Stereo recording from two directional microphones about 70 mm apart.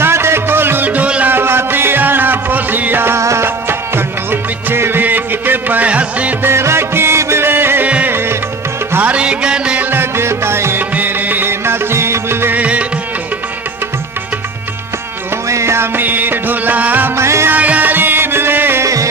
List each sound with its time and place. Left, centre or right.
0.0 s music: right; by 1.3 s centre
1.3 s music: right
6.4 s music: right
7.9 s music: centre
8.1 s music: right
8.9 s music: right
9.9 s music: right
10.9 s music: right
12.5 s music: centre
15.4 s music: right
17.2 s music: right
17.5 s music: right